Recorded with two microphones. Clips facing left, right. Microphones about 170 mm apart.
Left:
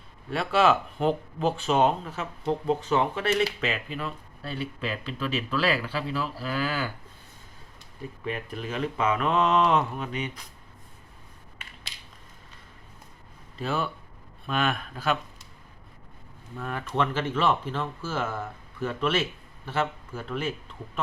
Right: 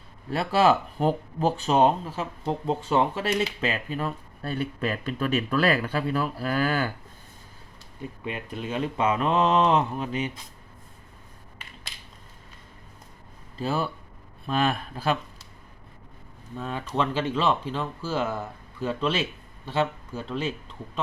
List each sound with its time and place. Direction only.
0.3 s a man's voice: 35° right (ahead or behind); by 6.9 s 50° right (ahead or behind)
8.2 s speech: 25° right (ahead or behind)
13.6 s speech: 35° right (ahead or behind)
16.6 s speech: 20° right (ahead or behind)